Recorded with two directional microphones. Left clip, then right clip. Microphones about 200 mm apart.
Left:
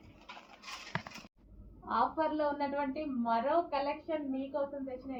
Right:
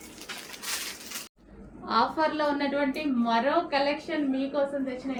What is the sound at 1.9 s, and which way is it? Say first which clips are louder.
A woman's voice: right 6 dB; 20° right (ahead or behind).